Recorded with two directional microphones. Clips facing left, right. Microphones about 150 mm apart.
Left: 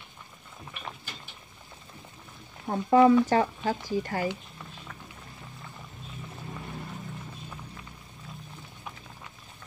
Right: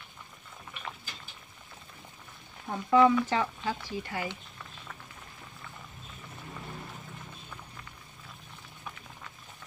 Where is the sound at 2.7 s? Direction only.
35° left (ahead or behind).